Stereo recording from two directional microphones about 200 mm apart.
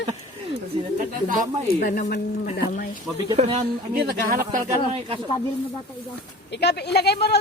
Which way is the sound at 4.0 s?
50° right (ahead or behind).